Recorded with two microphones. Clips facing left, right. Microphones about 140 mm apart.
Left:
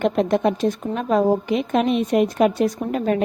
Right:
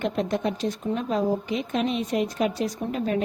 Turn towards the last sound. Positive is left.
turn(degrees=55)  # may be behind; listen again after turning